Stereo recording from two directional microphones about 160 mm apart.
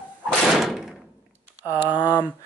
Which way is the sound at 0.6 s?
Centre (ahead or behind).